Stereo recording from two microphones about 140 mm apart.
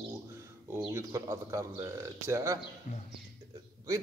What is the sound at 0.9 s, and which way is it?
A man's voice, 20° right (ahead or behind).